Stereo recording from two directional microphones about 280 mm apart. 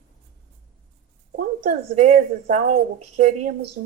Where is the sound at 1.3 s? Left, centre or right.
Right.